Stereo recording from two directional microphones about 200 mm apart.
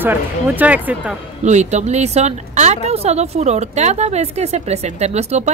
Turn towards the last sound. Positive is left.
turn(degrees=-35)  # may be behind; listen again after turning